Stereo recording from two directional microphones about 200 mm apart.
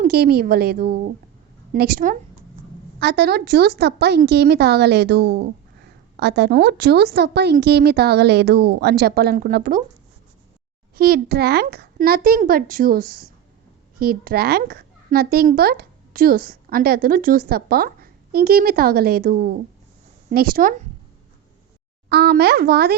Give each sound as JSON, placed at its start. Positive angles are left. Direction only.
{"t": 0.0, "sound": "a child's voice", "side_deg": -50}
{"t": 10.9, "sound": "a child's voice", "side_deg": -50}
{"t": 22.1, "sound": "a child's voice", "side_deg": -55}